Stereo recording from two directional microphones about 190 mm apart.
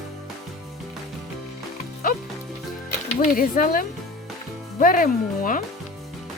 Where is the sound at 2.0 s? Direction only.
50° left (ahead or behind).